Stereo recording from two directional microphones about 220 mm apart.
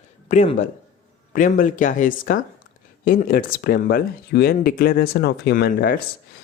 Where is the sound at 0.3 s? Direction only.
30° left (ahead or behind).